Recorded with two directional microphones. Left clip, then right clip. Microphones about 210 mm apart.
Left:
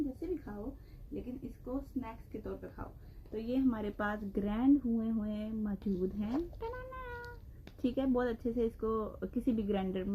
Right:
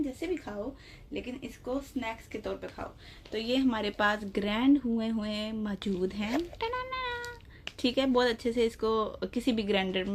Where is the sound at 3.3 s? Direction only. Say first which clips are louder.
Right 5 dB; 20° right (ahead or behind).